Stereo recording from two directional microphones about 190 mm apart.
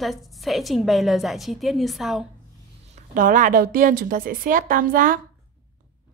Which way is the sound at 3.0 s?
45° right (ahead or behind).